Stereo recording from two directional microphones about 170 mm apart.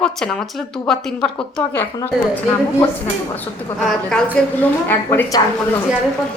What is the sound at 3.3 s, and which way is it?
Speech, 5° left (ahead or behind).